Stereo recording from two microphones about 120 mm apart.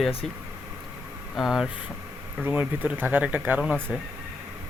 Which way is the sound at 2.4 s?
15° right (ahead or behind).